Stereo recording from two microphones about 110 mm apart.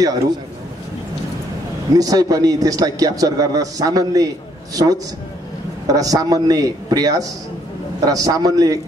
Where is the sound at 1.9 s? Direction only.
35° right (ahead or behind).